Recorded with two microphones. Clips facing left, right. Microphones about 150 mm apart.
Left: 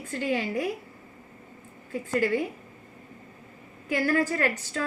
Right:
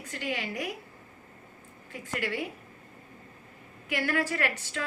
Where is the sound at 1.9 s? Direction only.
40° left (ahead or behind).